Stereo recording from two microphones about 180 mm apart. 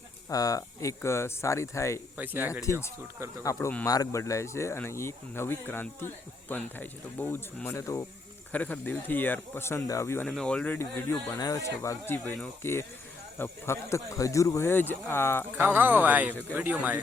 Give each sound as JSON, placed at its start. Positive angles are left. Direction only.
{"t": 0.3, "sound": "speech", "side_deg": 20}
{"t": 2.1, "sound": "speech", "side_deg": -10}
{"t": 2.7, "sound": "speech", "side_deg": 15}
{"t": 10.2, "sound": "speech", "side_deg": 5}
{"t": 15.5, "sound": "speech", "side_deg": -10}